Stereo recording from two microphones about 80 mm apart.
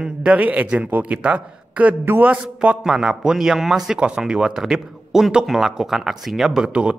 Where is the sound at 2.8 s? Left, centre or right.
Centre.